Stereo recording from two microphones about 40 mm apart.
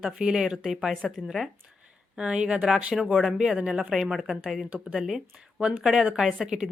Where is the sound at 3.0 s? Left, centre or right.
Centre.